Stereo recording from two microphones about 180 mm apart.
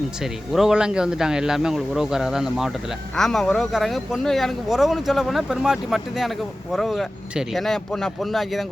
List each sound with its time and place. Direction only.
0.2 s speech: centre (ahead or behind)